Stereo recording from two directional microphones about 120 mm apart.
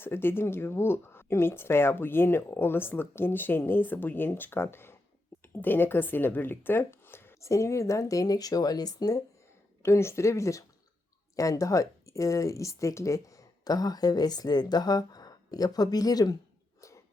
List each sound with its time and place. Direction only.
0.0 s speech: 20° left (ahead or behind)